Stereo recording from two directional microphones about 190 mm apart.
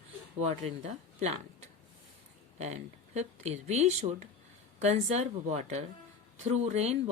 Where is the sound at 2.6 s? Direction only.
35° right (ahead or behind).